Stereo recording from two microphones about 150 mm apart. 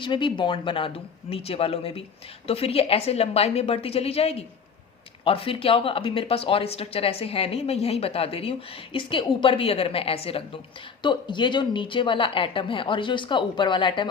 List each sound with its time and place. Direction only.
0.0 s speech: 35° left (ahead or behind)